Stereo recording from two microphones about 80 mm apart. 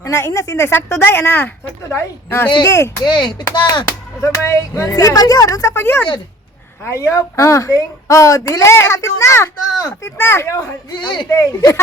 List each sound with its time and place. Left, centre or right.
0.0 s a woman's voice: left
3.0 s a child's voice: left
4.2 s a woman's voice: left
10.9 s a child's voice: left
11.3 s a woman's voice: left